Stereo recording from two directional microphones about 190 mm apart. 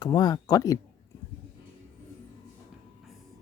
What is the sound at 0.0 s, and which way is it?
Speech, 20° left (ahead or behind).